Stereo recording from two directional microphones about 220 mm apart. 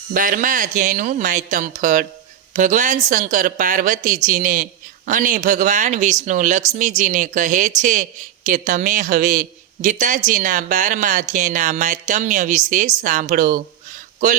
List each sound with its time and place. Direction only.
0.1 s a man's voice: 35° right (ahead or behind)